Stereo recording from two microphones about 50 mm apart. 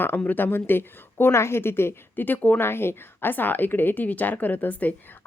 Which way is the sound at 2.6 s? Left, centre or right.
Left.